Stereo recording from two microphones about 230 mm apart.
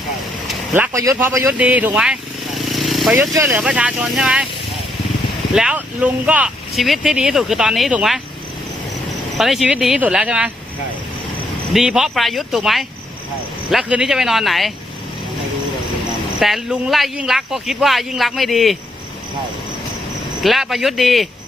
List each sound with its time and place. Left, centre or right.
0.4 s speech: centre
1.5 s vehicle: centre
3.5 s speech: centre
5.5 s speech: centre
9.4 s speech: centre
11.7 s speech: centre
16.4 s speech: centre
20.4 s speech: centre